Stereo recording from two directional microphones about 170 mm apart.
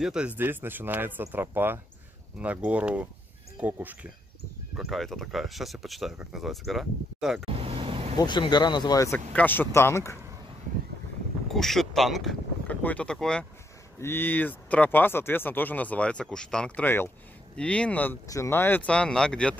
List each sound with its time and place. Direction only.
0.0 s speech: 5° right (ahead or behind)
7.4 s vehicle: 35° right (ahead or behind)
8.2 s speech: 25° left (ahead or behind)
11.5 s speech: centre (ahead or behind)